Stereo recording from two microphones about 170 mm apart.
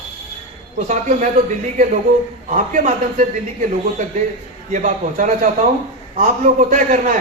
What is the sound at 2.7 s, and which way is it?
Speech, 50° right (ahead or behind).